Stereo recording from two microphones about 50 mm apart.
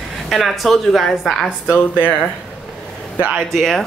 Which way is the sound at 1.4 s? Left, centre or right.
Left.